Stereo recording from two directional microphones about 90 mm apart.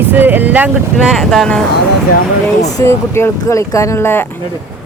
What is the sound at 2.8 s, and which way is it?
Speech, 30° left (ahead or behind).